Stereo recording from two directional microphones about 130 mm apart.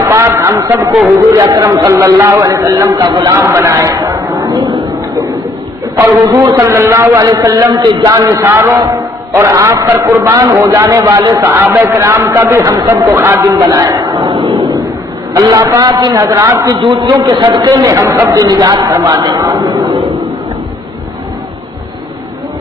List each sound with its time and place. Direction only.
0.1 s a man's voice: 20° right (ahead or behind)
5.9 s a man's voice: 25° right (ahead or behind)
16.7 s a man's voice: 40° right (ahead or behind)